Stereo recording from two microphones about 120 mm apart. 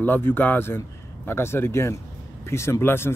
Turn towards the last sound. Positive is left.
turn(degrees=20)  # may be behind; listen again after turning